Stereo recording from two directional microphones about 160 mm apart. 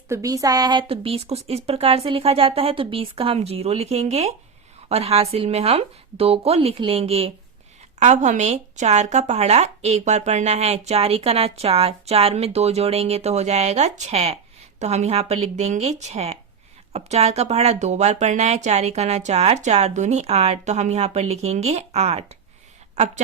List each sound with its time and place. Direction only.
0.1 s a woman's voice: 20° right (ahead or behind); by 22.4 s 40° right (ahead or behind)